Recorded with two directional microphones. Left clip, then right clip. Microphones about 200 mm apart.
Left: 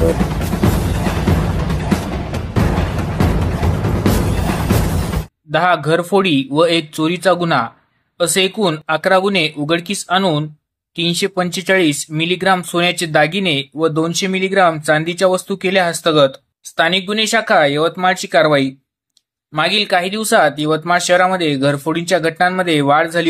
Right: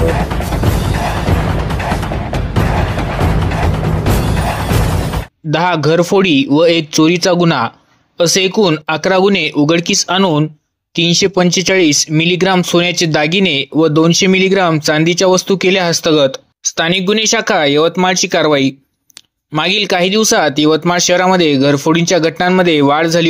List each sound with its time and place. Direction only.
1.6 s music: centre (ahead or behind)
5.5 s speech: 35° right (ahead or behind)